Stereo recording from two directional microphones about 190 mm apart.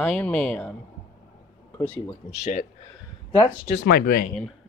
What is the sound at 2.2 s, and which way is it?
Speech, 40° left (ahead or behind).